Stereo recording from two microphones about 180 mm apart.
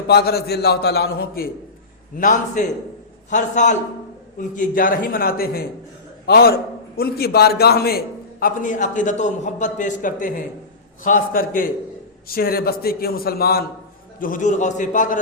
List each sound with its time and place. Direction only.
0.1 s a man's voice: 60° left (ahead or behind)
2.1 s a man's voice: 45° left (ahead or behind)